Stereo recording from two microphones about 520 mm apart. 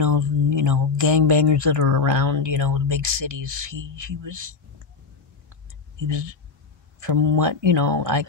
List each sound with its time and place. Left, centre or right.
0.0 s speech: right
6.0 s speech: right